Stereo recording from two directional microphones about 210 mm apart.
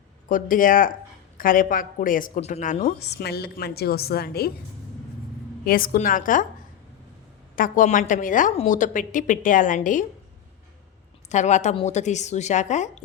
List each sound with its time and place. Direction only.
0.3 s a woman's voice: 40° left (ahead or behind)
5.6 s a woman's voice: 45° left (ahead or behind)
7.5 s a woman's voice: 40° left (ahead or behind)
11.3 s a woman's voice: 35° left (ahead or behind)